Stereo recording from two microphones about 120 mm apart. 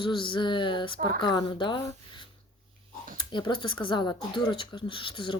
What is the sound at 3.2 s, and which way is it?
Speech, 40° left (ahead or behind).